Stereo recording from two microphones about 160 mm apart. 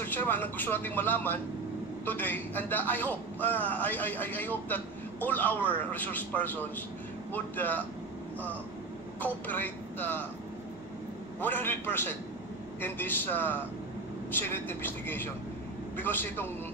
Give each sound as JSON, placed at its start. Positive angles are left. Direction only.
{"t": 0.0, "sound": "a man's voice", "side_deg": 10}
{"t": 9.2, "sound": "a man's voice", "side_deg": 10}
{"t": 11.4, "sound": "a man's voice", "side_deg": 10}